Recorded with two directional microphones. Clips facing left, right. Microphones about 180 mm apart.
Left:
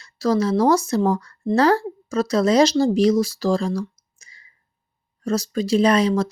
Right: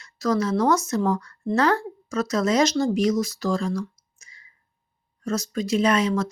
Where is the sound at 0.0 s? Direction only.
30° left (ahead or behind).